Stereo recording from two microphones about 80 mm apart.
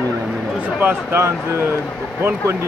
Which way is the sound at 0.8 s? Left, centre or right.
Right.